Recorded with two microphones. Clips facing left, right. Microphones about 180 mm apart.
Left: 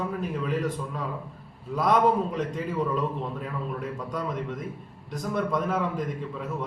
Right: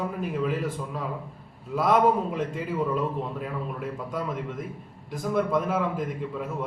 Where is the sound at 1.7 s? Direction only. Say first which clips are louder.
Right 1 dB; 5° right (ahead or behind).